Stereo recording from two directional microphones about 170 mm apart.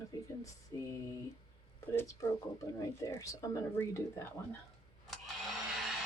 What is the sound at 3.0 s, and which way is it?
Speech, 20° left (ahead or behind).